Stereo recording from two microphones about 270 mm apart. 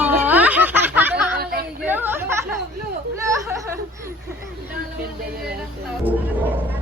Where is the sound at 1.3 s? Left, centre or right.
Right.